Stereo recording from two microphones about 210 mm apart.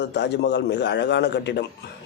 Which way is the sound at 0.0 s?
55° left (ahead or behind).